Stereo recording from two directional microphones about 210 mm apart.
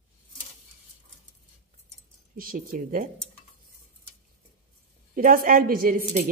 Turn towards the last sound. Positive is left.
turn(degrees=-45)  # may be behind; listen again after turning